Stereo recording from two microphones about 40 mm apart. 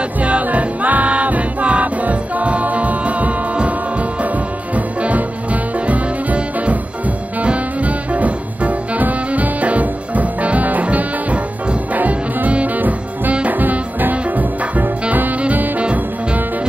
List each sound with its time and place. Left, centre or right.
0.2 s music: right
4.7 s music: right